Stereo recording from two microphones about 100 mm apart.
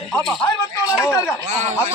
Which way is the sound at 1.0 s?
35° left (ahead or behind).